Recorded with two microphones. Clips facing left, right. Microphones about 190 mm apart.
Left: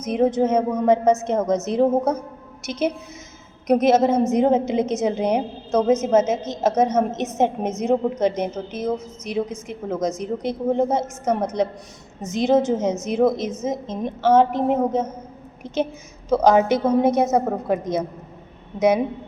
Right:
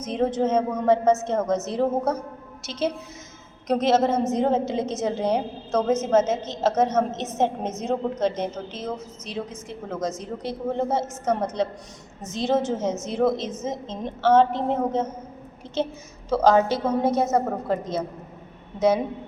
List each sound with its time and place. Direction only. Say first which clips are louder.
0.0 s a woman's voice: left 4 dB; 10° left (ahead or behind)